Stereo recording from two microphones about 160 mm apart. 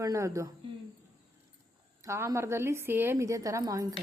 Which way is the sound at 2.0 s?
20° right (ahead or behind).